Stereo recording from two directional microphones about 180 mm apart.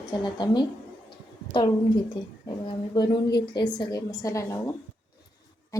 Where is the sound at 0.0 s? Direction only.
25° left (ahead or behind).